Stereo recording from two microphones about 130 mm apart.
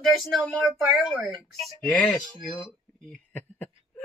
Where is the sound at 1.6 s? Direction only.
5° left (ahead or behind).